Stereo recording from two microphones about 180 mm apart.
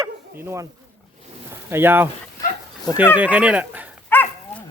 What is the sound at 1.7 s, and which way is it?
Speech, 10° right (ahead or behind).